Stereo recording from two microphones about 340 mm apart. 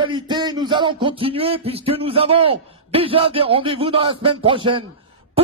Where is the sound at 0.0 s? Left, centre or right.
Centre.